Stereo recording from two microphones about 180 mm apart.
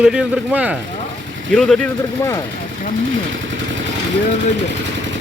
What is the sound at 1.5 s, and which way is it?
Speech, 5° left (ahead or behind).